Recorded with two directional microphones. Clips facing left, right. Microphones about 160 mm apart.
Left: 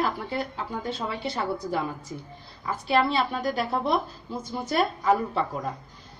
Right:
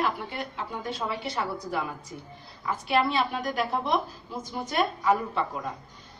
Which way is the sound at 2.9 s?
30° left (ahead or behind).